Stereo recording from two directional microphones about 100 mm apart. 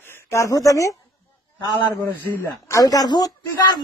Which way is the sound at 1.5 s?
20° left (ahead or behind).